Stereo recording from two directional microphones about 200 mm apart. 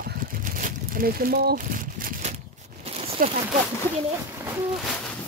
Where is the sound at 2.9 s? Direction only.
30° right (ahead or behind).